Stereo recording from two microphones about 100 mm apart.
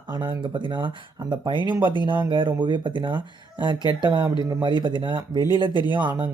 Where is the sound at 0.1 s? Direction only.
55° right (ahead or behind).